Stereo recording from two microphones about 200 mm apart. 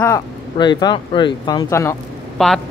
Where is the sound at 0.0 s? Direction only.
20° left (ahead or behind).